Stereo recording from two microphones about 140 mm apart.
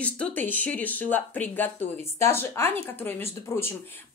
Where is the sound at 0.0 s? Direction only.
10° left (ahead or behind).